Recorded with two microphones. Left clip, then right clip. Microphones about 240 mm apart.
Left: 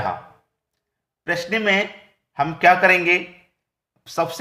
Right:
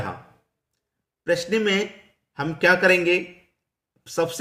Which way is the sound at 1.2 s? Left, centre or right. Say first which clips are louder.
Even; centre.